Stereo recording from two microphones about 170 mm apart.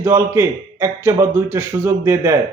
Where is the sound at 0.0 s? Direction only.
15° right (ahead or behind).